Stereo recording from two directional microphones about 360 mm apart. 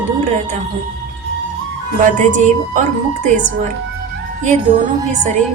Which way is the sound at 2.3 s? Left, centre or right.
Centre.